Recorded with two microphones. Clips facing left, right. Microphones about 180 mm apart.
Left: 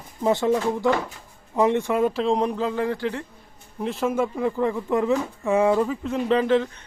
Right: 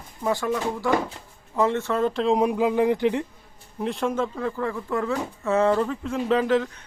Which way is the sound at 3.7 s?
Centre (ahead or behind).